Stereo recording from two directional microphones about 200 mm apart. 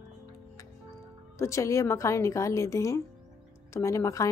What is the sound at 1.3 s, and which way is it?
Speech, 15° left (ahead or behind).